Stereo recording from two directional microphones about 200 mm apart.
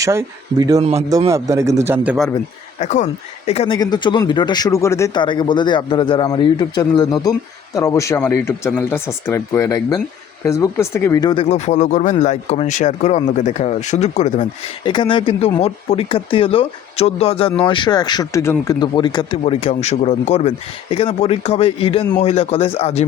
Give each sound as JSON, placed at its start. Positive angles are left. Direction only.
{"t": 0.0, "sound": "speech", "side_deg": -15}
{"t": 0.8, "sound": "a man's voice", "side_deg": -30}
{"t": 1.1, "sound": "speech", "side_deg": -15}
{"t": 2.7, "sound": "speech", "side_deg": 35}
{"t": 3.8, "sound": "speech", "side_deg": 20}
{"t": 14.8, "sound": "speech", "side_deg": 25}